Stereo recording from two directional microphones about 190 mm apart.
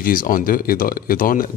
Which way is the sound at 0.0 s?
50° left (ahead or behind).